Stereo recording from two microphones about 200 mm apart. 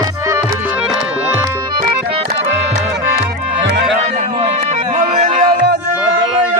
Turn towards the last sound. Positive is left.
turn(degrees=-35)  # may be behind; listen again after turning